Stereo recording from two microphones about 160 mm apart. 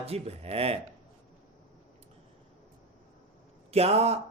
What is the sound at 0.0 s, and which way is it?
Speech, 40° right (ahead or behind).